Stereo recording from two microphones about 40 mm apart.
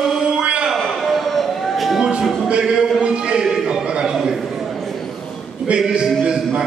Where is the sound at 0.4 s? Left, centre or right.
Right.